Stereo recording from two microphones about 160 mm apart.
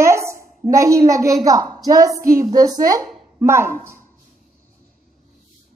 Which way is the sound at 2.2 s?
60° right (ahead or behind).